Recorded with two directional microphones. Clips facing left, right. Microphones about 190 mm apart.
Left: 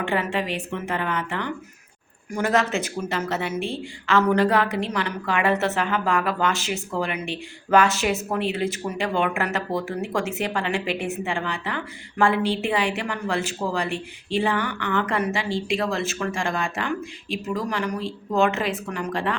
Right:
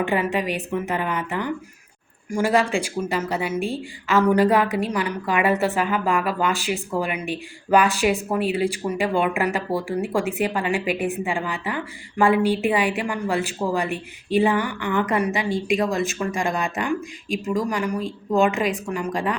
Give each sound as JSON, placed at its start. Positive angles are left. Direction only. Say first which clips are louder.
{"t": 0.1, "sound": "speech", "louder": "right 2 dB", "side_deg": -15}